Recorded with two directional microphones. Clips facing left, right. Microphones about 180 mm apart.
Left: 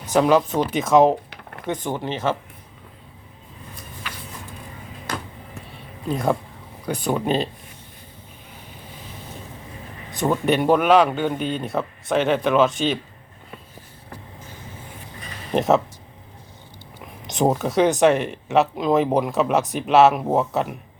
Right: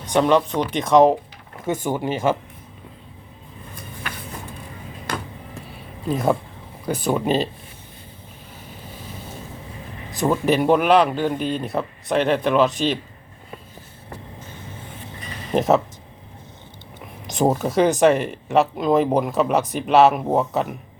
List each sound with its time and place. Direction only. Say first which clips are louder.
0.0 s speech: even; 5° left (ahead or behind)
1.6 s speech: right 3 dB; 10° right (ahead or behind)
4.0 s vehicle: right 3 dB; 55° right (ahead or behind)
6.1 s speech: right 2 dB; 5° right (ahead or behind)
10.1 s speech: right 1 dB; centre (ahead or behind)
15.5 s speech: right 1 dB; centre (ahead or behind)
17.0 s speech: right 1 dB; centre (ahead or behind)